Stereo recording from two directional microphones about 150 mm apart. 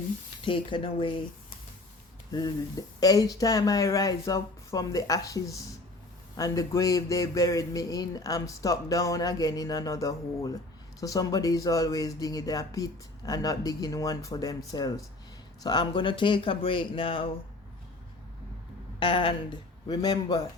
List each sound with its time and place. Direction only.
0.4 s speech: 35° left (ahead or behind)
2.3 s speech: 25° left (ahead or behind)
18.9 s speech: 35° left (ahead or behind)